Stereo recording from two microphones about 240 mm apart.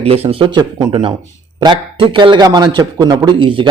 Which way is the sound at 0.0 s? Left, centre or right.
Right.